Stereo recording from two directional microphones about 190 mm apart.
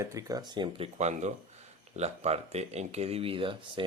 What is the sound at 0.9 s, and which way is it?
Speech, 35° right (ahead or behind).